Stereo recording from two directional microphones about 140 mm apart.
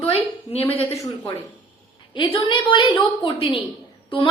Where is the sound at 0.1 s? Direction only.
45° left (ahead or behind).